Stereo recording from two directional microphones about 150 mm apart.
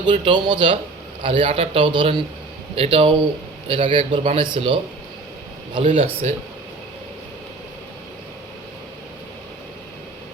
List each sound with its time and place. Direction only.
0.0 s speech: 30° right (ahead or behind)
6.0 s speech: 40° right (ahead or behind)